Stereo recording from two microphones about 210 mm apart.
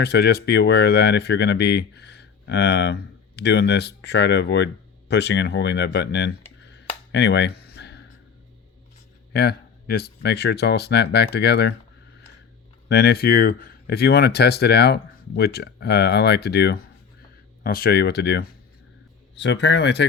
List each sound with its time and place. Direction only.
0.0 s speech: 50° left (ahead or behind)
6.6 s a sound: 55° left (ahead or behind)
9.3 s speech: 50° left (ahead or behind)
12.9 s speech: 50° left (ahead or behind)